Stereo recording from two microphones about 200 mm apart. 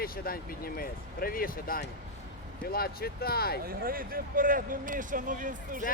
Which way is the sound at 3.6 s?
45° right (ahead or behind).